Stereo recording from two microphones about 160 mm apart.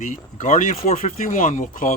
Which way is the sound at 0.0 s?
55° left (ahead or behind).